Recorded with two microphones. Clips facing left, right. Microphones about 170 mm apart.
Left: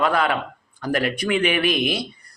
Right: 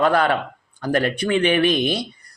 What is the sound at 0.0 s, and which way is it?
Speech, 35° right (ahead or behind).